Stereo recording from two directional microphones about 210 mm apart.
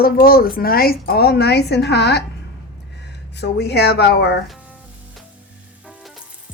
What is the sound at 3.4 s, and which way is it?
Speech, 50° left (ahead or behind).